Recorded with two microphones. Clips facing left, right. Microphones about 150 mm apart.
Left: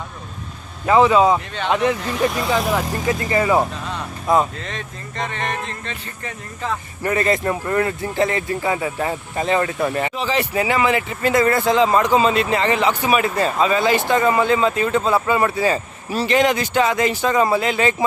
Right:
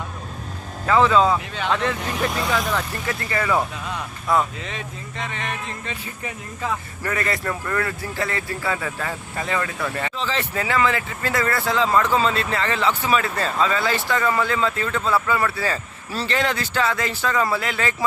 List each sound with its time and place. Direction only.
0.9 s speech: 15° left (ahead or behind)
2.2 s speech: 5° left (ahead or behind)
3.1 s speech: 20° left (ahead or behind)
4.6 s speech: 5° right (ahead or behind)
7.0 s speech: 25° left (ahead or behind)